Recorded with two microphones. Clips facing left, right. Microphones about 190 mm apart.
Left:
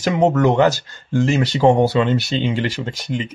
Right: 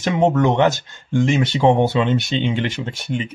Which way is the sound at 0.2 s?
Centre (ahead or behind).